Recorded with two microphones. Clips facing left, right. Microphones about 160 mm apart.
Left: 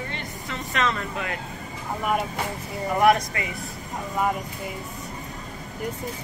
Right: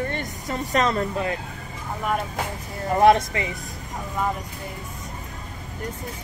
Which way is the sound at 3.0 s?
25° right (ahead or behind).